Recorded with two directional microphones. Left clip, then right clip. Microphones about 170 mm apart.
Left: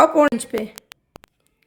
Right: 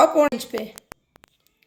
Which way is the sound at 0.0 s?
45° left (ahead or behind).